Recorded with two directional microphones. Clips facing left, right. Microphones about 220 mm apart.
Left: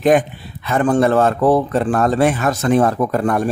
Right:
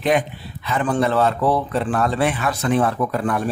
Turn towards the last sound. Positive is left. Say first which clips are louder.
# left 4 dB
turn(degrees=45)  # may be behind; listen again after turning